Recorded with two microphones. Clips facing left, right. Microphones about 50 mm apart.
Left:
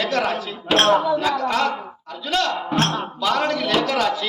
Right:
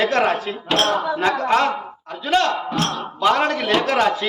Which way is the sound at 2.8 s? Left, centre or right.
Left.